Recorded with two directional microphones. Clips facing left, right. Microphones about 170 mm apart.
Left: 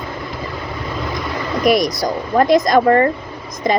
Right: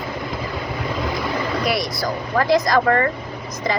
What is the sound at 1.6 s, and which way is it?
Speech, 20° left (ahead or behind).